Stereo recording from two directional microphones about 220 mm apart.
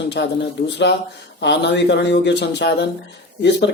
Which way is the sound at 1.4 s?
50° left (ahead or behind).